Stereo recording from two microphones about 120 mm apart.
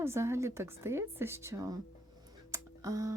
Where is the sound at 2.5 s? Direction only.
25° right (ahead or behind).